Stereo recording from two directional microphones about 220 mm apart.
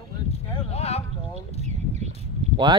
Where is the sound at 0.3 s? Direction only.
30° left (ahead or behind).